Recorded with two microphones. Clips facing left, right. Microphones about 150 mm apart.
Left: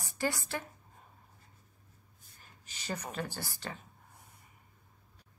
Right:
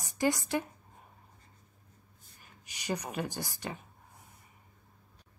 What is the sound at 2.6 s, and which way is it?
Speech, 15° right (ahead or behind).